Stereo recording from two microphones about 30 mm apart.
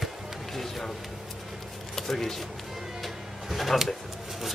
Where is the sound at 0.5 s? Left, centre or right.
Centre.